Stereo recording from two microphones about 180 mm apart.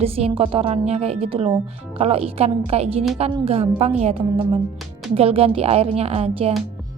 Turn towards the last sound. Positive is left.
turn(degrees=-35)  # may be behind; listen again after turning